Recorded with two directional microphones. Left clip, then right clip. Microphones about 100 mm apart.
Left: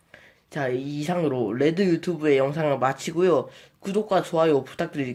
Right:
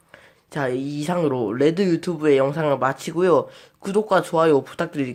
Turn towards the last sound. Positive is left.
turn(degrees=-30)  # may be behind; listen again after turning